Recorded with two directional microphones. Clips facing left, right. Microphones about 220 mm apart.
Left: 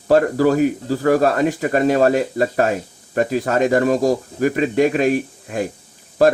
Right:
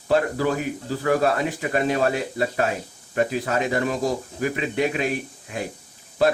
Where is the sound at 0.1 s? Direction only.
45° left (ahead or behind).